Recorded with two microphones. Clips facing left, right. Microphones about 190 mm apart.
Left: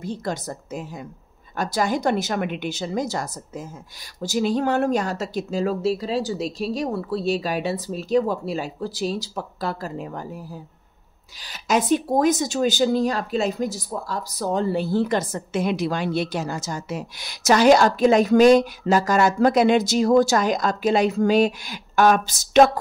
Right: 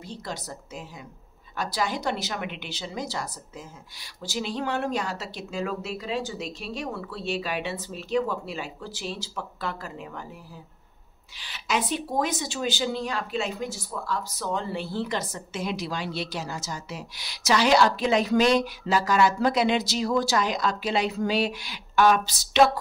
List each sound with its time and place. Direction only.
0.0 s speech: 50° left (ahead or behind)
11.4 s speech: 40° left (ahead or behind)